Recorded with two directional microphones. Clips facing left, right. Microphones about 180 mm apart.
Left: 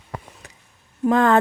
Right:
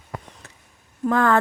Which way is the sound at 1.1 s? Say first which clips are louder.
Left 2 dB; 20° left (ahead or behind).